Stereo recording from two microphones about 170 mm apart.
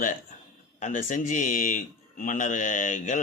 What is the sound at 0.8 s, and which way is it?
A man's voice, 45° left (ahead or behind).